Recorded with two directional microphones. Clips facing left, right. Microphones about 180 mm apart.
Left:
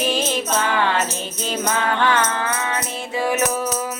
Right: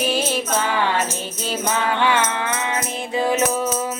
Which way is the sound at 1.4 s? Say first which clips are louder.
Even; 15° right (ahead or behind).